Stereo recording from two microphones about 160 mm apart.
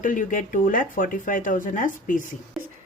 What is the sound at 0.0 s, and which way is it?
Speech, 55° left (ahead or behind).